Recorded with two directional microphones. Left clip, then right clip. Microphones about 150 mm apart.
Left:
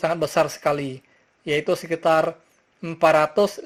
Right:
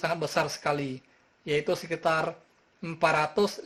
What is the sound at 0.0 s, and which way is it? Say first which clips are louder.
Speech: left 7 dB; 35° left (ahead or behind).